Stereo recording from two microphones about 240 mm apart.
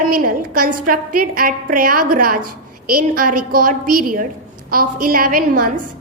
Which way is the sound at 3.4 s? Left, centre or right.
Right.